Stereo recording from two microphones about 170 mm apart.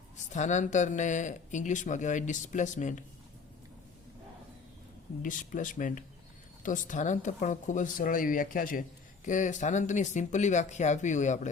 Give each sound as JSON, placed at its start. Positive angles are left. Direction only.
{"t": 0.3, "sound": "speech", "side_deg": 45}
{"t": 5.2, "sound": "speech", "side_deg": 50}